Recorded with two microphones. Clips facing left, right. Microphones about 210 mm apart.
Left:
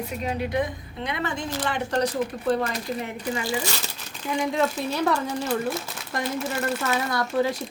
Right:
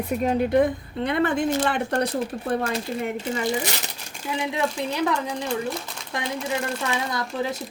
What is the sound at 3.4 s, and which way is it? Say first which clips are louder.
Speech: right 3 dB; 20° right (ahead or behind).